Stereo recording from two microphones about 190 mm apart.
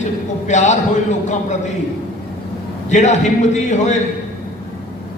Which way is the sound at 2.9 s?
40° left (ahead or behind).